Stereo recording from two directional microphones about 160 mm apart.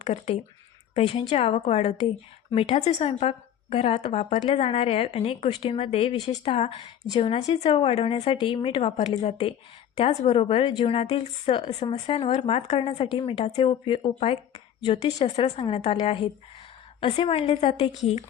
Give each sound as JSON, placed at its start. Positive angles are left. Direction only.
{"t": 0.0, "sound": "a woman's voice", "side_deg": 40}